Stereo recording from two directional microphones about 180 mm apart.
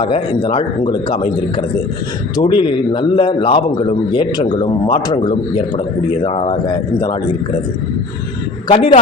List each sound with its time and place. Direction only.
0.0 s a man's voice: 30° left (ahead or behind)
2.3 s a man's voice: 25° left (ahead or behind)
8.6 s speech: 30° left (ahead or behind)